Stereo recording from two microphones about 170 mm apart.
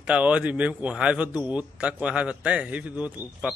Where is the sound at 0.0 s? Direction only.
5° right (ahead or behind).